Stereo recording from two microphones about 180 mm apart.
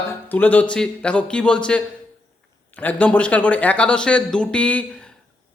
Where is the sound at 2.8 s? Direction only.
10° left (ahead or behind).